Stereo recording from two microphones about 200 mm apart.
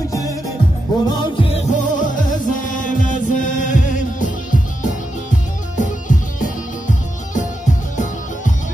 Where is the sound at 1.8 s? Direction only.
40° left (ahead or behind).